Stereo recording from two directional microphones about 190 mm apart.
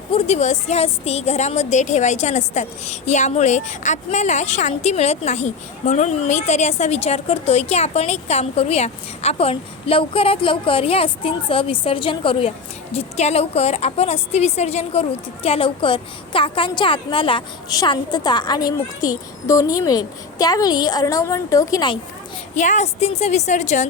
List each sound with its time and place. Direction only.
0.1 s a woman's voice: 35° left (ahead or behind); by 21.9 s 20° left (ahead or behind)
22.5 s a woman's voice: 40° left (ahead or behind)